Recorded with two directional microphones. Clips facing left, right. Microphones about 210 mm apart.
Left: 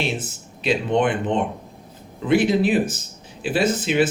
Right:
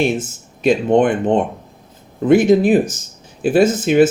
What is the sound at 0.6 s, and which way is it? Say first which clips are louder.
Speech: right 7 dB; 45° right (ahead or behind).